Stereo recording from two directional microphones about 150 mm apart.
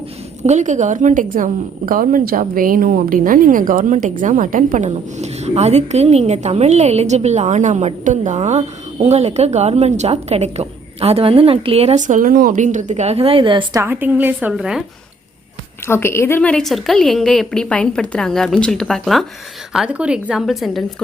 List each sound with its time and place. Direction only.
0.4 s a woman's voice: 55° right (ahead or behind)
4.9 s a woman's voice: 45° right (ahead or behind)
13.8 s a woman's voice: 15° right (ahead or behind)
15.9 s a woman's voice: 15° left (ahead or behind); by 20.8 s centre (ahead or behind)